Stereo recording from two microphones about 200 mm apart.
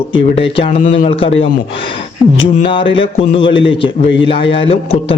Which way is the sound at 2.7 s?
25° left (ahead or behind).